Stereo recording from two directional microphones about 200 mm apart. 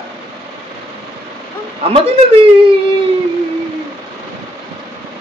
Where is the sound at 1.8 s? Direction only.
30° right (ahead or behind).